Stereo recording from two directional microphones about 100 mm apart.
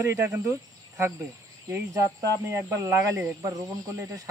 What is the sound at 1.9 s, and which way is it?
Speech, 30° right (ahead or behind).